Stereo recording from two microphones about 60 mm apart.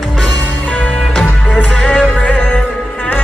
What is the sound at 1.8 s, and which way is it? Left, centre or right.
Music, left.